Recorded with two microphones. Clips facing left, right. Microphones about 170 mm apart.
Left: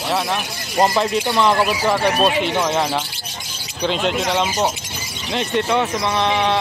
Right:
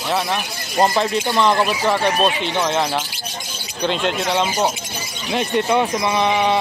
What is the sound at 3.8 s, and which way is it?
Speech, centre (ahead or behind).